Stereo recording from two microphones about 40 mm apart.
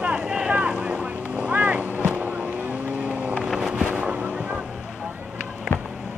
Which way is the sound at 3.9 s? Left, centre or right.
Right.